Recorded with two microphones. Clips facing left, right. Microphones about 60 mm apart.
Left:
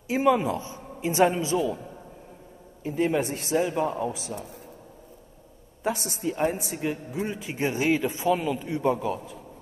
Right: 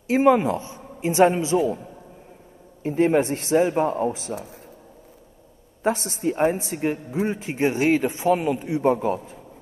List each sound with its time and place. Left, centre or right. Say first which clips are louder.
0.1 s speech: right 5 dB; right
2.8 s speech: right 6 dB; right
5.9 s a man's voice: right 5 dB; right